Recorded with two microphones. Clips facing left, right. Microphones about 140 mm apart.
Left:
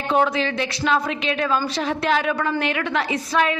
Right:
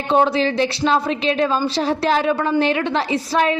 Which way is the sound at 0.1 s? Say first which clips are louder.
Right 4 dB; 30° right (ahead or behind).